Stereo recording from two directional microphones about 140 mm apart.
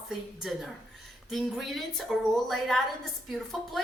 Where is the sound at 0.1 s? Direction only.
5° right (ahead or behind).